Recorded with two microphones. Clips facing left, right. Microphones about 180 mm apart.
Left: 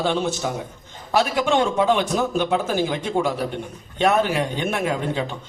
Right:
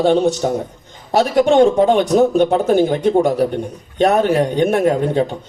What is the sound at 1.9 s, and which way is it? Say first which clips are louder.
A man's voice: right 8 dB; 35° right (ahead or behind).